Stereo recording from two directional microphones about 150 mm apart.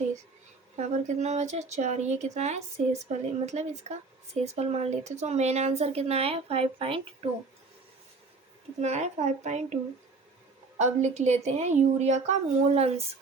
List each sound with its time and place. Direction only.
0.8 s speech: 50° right (ahead or behind)
8.8 s speech: 50° right (ahead or behind)
10.8 s speech: 50° right (ahead or behind)